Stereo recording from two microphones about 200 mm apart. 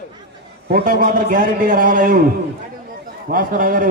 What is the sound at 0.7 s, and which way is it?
A man's voice, 45° right (ahead or behind).